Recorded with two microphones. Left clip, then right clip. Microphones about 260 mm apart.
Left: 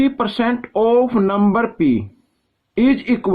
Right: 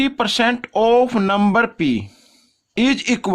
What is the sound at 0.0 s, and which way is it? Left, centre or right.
Speech, right.